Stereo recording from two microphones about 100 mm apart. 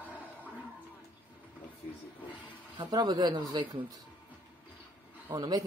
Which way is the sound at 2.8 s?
45° right (ahead or behind).